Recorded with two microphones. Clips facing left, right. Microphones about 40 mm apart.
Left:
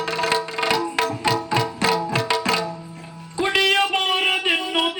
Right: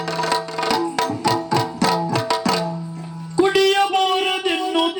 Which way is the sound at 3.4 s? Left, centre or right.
Left.